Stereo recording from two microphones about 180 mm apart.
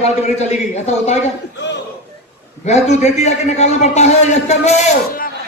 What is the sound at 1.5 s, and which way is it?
Speech, 75° left (ahead or behind).